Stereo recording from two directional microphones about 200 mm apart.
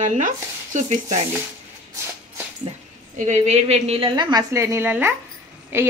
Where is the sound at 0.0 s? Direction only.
40° right (ahead or behind).